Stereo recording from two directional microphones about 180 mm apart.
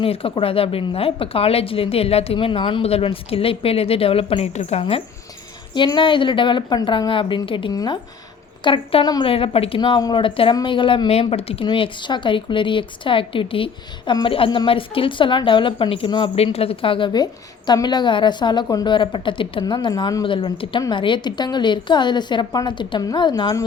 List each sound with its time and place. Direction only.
0.0 s a woman's voice: 30° left (ahead or behind)